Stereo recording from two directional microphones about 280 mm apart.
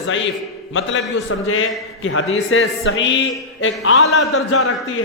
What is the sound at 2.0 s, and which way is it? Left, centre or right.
A man's voice, left.